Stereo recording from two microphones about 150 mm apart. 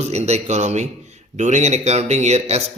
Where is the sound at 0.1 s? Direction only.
45° right (ahead or behind).